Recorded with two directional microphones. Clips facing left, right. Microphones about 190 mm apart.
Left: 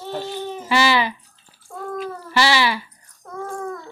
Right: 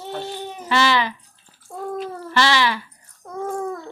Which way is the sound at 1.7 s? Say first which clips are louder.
Right 1 dB; 20° right (ahead or behind).